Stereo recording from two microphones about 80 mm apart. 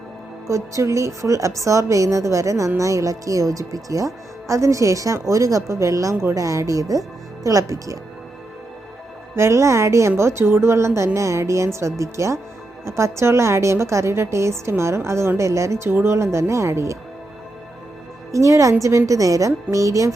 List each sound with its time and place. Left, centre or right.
0.4 s a woman's voice: right
9.3 s a woman's voice: right
18.3 s a woman's voice: right